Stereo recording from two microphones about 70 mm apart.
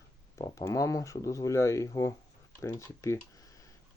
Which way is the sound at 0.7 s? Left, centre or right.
Left.